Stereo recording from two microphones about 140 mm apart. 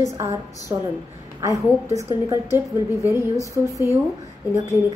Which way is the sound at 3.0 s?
25° left (ahead or behind).